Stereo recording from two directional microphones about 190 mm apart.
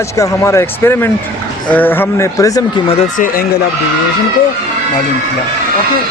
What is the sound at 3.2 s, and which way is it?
Speech, 50° left (ahead or behind).